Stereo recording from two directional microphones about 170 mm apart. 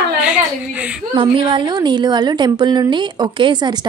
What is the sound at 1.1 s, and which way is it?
A woman's voice, 30° right (ahead or behind).